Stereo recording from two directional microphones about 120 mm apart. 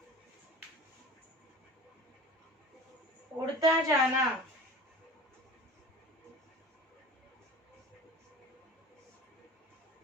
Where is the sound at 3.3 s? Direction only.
30° right (ahead or behind).